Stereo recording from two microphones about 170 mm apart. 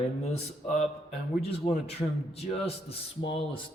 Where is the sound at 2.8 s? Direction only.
30° left (ahead or behind).